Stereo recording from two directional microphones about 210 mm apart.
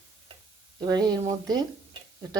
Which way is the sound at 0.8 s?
20° right (ahead or behind).